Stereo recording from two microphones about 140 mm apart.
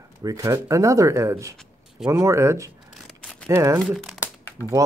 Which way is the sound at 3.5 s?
20° right (ahead or behind).